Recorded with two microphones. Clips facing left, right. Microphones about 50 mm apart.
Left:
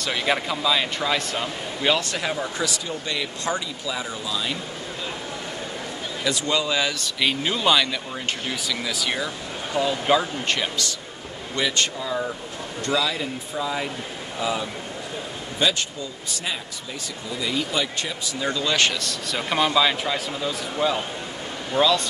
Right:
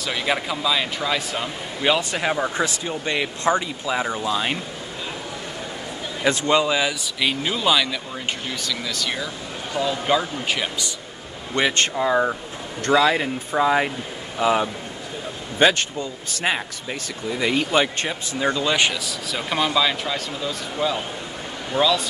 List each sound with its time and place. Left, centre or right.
0.0 s a man's voice: centre; by 4.6 s right
6.2 s speech: right; by 7.1 s centre
7.2 s a man's voice: centre
11.5 s speech: right
18.4 s a man's voice: right; by 22.0 s centre